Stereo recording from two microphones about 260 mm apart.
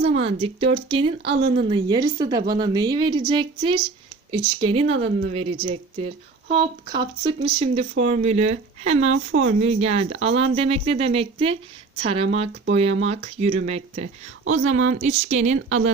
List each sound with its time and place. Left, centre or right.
0.0 s speech: right
9.0 s speech: right
9.5 s speech: right
14.7 s speech: right
15.0 s speech: right